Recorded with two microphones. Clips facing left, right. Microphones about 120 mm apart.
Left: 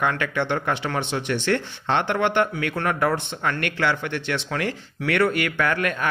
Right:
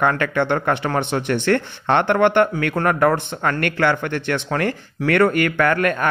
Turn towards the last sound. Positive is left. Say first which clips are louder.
# right 5 dB
turn(degrees=-50)  # may be behind; listen again after turning